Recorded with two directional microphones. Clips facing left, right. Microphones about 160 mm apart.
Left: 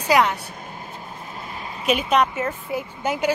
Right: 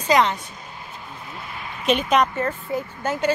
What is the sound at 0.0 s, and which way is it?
Speech, 10° left (ahead or behind).